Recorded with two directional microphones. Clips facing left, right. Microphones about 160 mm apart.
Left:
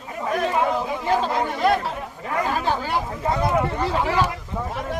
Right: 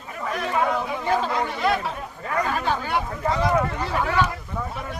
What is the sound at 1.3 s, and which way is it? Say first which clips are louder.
Speech: left 3 dB; 40° left (ahead or behind).